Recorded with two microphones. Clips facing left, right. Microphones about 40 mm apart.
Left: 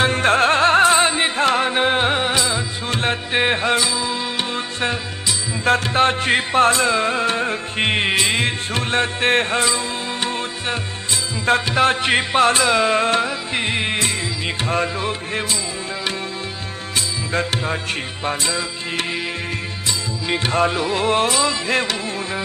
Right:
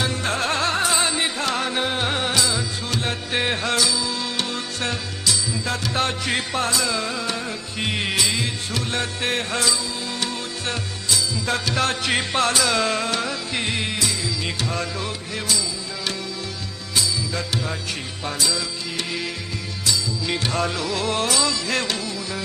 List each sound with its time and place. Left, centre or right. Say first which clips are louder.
0.0 s music: left 8 dB; left
5.6 s music: left 10 dB; left
16.9 s music: left 2 dB; left